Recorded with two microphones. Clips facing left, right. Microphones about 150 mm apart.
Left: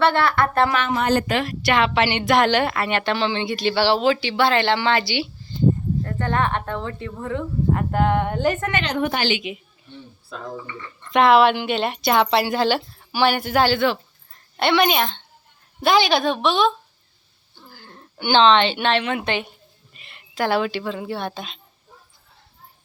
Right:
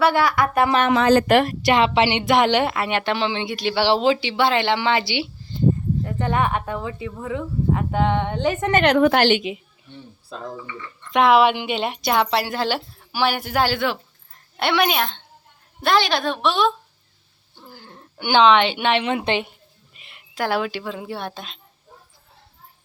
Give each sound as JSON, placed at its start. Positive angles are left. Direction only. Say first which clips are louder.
{"t": 0.0, "sound": "a woman's voice", "louder": "even", "side_deg": -10}
{"t": 0.9, "sound": "speech", "louder": "right 5 dB", "side_deg": -65}
{"t": 1.7, "sound": "a woman's voice", "louder": "right 2 dB", "side_deg": -25}
{"t": 8.8, "sound": "a woman's voice", "louder": "right 11 dB", "side_deg": -70}
{"t": 11.1, "sound": "a woman's voice", "louder": "left 1 dB", "side_deg": -10}
{"t": 19.9, "sound": "a woman's voice", "louder": "left 2 dB", "side_deg": -5}